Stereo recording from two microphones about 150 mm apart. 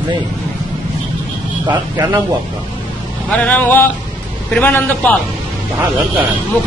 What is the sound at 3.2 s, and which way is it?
A man's voice, 10° left (ahead or behind).